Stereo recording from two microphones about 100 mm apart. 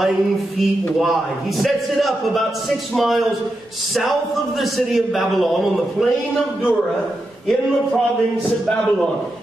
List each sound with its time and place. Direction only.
1.6 s a man's voice: centre (ahead or behind)